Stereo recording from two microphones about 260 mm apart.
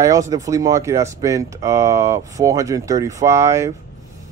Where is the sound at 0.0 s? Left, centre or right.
Centre.